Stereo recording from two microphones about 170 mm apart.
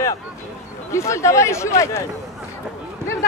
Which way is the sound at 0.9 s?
15° left (ahead or behind).